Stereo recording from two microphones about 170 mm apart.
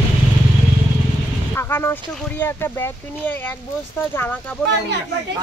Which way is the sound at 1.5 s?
15° left (ahead or behind).